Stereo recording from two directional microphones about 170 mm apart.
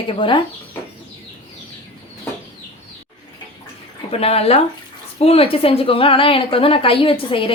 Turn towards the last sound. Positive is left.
turn(degrees=30)  # may be behind; listen again after turning